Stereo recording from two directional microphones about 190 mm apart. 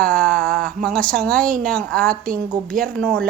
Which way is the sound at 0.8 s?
5° left (ahead or behind).